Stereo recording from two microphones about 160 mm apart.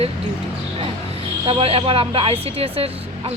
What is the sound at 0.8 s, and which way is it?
Speech, 35° right (ahead or behind).